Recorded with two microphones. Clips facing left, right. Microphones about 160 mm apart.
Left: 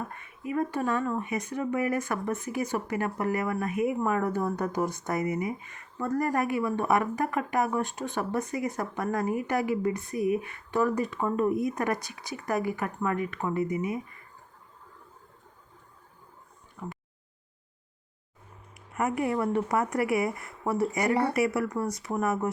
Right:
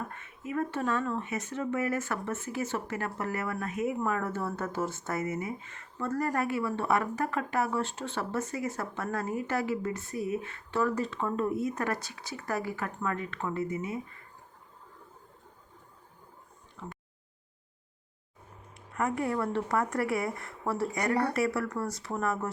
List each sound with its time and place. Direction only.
0.1 s speech: 10° left (ahead or behind)
16.8 s a sound: 15° left (ahead or behind)
19.2 s speech: 15° left (ahead or behind)
20.4 s speech: centre (ahead or behind)
21.6 s speech: 15° left (ahead or behind)